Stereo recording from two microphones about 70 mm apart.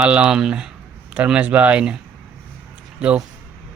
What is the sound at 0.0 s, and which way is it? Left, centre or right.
Speech, centre.